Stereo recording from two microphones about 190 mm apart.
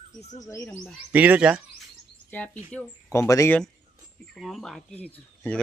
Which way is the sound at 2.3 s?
10° left (ahead or behind).